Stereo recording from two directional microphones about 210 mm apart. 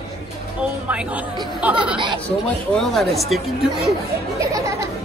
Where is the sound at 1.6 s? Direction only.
5° right (ahead or behind).